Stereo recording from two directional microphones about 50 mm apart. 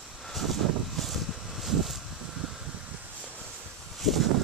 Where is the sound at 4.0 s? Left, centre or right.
Centre.